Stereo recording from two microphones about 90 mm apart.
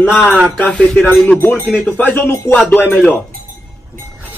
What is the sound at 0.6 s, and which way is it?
A man's voice, 15° left (ahead or behind).